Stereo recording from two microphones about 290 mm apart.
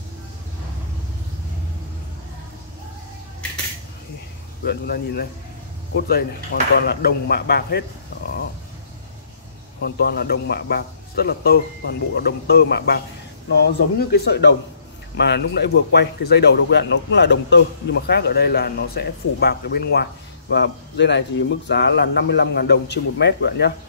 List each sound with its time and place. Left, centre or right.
4.6 s speech: left
9.8 s speech: left